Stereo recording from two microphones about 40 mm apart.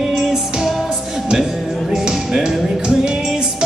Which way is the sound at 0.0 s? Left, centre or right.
Centre.